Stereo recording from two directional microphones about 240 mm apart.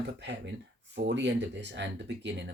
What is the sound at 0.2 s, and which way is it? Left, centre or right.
Speech, right.